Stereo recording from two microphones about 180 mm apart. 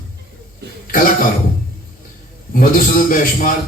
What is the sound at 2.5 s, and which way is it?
Speech, 50° left (ahead or behind).